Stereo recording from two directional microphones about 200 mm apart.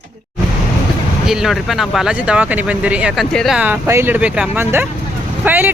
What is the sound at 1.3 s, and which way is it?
Speech, centre (ahead or behind).